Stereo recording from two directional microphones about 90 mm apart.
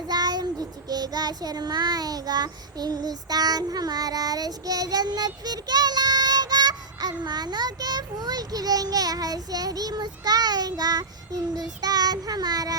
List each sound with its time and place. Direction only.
0.1 s child singing: 50° right (ahead or behind)